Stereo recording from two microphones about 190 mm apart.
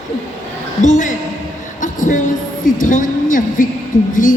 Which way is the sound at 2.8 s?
45° left (ahead or behind).